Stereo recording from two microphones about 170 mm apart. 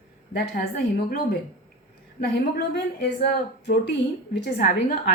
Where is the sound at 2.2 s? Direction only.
75° left (ahead or behind).